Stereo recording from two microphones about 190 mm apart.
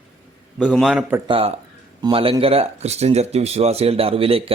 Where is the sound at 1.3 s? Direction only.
30° right (ahead or behind).